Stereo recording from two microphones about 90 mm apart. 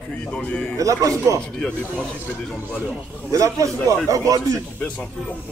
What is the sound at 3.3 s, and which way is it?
A man's voice, 35° right (ahead or behind).